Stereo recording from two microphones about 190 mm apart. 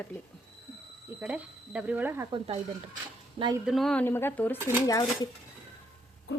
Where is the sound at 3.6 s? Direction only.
Centre (ahead or behind); by 5.3 s 20° left (ahead or behind).